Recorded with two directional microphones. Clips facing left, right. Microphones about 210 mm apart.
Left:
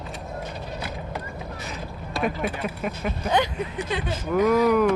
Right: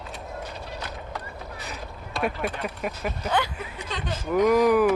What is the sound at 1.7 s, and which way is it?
Speech, centre (ahead or behind).